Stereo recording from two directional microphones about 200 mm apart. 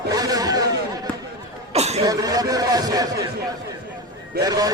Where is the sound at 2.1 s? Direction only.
20° right (ahead or behind).